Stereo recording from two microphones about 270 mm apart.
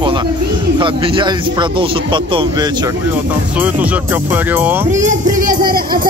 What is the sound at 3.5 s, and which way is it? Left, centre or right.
A man's voice, centre.